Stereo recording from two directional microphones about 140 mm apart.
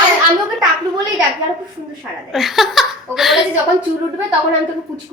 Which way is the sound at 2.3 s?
Centre (ahead or behind).